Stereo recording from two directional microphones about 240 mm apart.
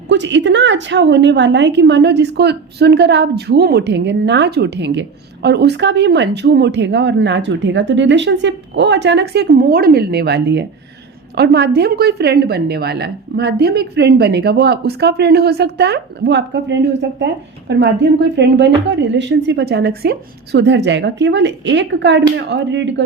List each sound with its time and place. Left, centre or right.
0.1 s a woman's voice: right